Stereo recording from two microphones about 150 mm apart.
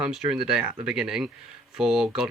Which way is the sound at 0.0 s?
5° right (ahead or behind).